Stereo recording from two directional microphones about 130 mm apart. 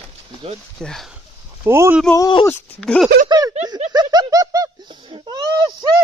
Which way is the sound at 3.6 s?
60° right (ahead or behind).